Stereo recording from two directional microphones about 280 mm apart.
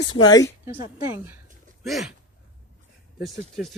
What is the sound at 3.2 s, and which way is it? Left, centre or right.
Speech, centre.